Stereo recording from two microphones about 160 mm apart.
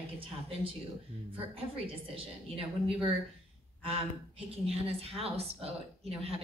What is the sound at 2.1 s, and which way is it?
Speech, 35° right (ahead or behind).